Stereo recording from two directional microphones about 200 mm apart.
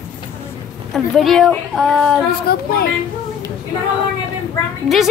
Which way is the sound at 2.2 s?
50° left (ahead or behind).